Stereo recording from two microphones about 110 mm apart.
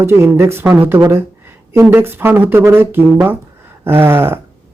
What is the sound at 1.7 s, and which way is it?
Speech, 20° right (ahead or behind).